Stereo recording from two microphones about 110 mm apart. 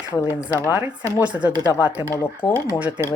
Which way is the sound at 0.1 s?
20° left (ahead or behind).